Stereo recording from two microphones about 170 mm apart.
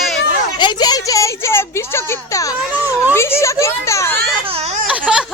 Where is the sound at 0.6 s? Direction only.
25° left (ahead or behind).